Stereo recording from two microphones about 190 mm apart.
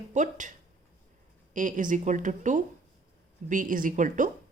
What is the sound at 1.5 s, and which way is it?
Speech, 40° right (ahead or behind).